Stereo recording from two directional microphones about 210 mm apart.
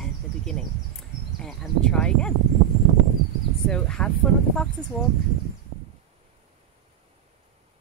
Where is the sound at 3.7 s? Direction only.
5° left (ahead or behind).